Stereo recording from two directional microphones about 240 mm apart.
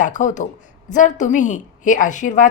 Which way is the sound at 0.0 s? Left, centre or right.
Left.